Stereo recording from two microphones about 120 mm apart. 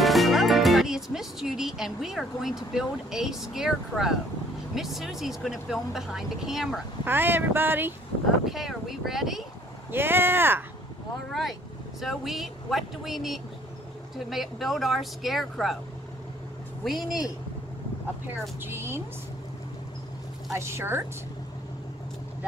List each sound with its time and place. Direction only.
0.0 s speech: centre (ahead or behind)
7.1 s a sound: 15° right (ahead or behind)
8.5 s speech: centre (ahead or behind)
9.8 s a sound: 20° right (ahead or behind)
12.0 s speech: centre (ahead or behind)
16.8 s speech: centre (ahead or behind)
18.6 s a woman's voice: 20° right (ahead or behind)
20.5 s a woman's voice: 20° right (ahead or behind)